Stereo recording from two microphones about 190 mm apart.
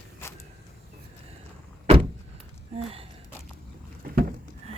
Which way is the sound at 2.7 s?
30° right (ahead or behind).